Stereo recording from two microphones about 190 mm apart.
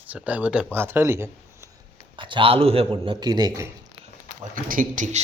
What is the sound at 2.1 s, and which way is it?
A man's voice, 25° right (ahead or behind).